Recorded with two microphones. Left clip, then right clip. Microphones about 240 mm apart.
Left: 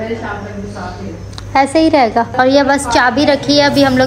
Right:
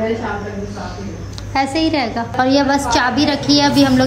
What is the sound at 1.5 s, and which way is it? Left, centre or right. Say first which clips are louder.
Speech: left 6 dB; centre.